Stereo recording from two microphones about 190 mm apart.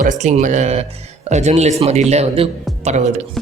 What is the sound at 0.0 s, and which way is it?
Speech, 40° right (ahead or behind).